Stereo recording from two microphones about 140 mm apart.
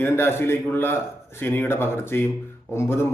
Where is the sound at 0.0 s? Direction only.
15° left (ahead or behind).